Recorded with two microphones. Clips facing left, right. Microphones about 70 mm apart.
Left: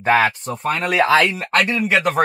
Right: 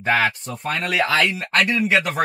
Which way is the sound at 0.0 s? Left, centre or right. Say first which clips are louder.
Left 4 dB; left.